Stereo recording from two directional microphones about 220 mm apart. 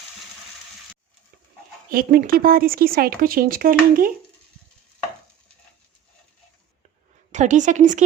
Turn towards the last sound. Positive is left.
turn(degrees=-35)  # may be behind; listen again after turning